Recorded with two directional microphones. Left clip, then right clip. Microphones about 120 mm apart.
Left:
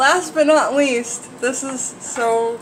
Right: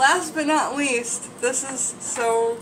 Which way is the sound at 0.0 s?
40° left (ahead or behind).